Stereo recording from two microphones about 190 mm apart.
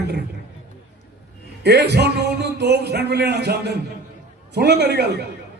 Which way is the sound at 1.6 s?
60° right (ahead or behind).